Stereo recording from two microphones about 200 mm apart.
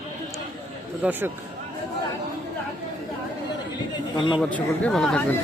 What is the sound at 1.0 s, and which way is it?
Speech, 10° right (ahead or behind).